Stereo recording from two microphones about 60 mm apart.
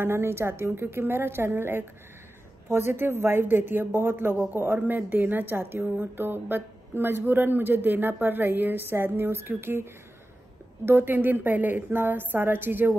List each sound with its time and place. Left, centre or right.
0.0 s speech: right
10.9 s speech: right